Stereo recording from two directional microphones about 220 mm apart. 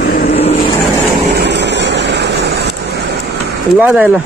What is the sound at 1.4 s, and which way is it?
Vehicle, 50° right (ahead or behind).